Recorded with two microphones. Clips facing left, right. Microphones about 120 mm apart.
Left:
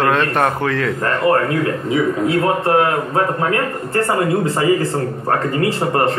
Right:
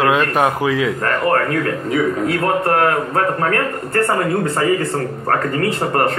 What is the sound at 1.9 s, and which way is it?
A man's voice, 25° left (ahead or behind).